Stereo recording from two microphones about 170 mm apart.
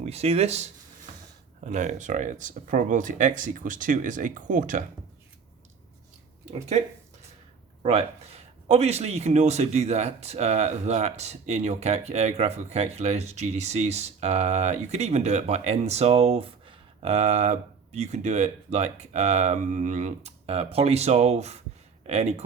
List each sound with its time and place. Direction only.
0.0 s speech: 35° right (ahead or behind)
6.5 s speech: 40° right (ahead or behind)